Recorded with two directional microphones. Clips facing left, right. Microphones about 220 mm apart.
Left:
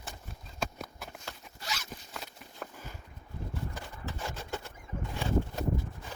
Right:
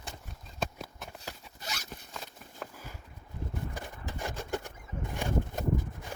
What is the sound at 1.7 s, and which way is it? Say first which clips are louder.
Zipper: left 3 dB; 50° right (ahead or behind).